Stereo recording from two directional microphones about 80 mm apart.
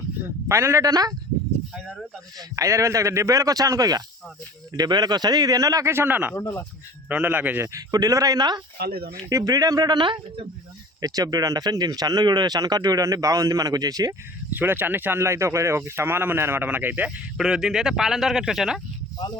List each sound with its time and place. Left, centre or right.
0.4 s speech: right
2.6 s a man's voice: right
5.9 s speech: right
6.3 s speech: left
7.1 s speech: right
7.6 s a man's voice: right
11.0 s speech: right
14.5 s speech: right
17.3 s speech: centre